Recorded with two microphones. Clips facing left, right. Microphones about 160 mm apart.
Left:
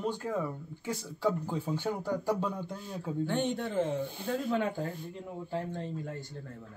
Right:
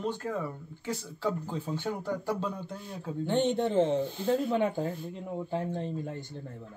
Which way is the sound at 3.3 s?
20° right (ahead or behind).